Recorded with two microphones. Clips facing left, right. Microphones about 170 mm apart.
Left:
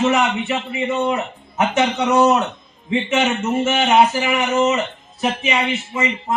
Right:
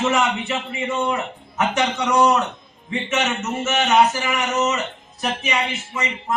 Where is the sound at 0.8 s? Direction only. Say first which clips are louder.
Left 3 dB; 20° left (ahead or behind).